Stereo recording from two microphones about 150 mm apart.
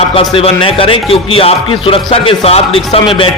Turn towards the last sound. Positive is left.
turn(degrees=40)  # may be behind; listen again after turning